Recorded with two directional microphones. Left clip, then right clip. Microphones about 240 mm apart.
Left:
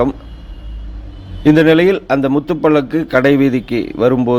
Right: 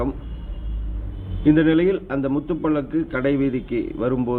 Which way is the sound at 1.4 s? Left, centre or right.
Left.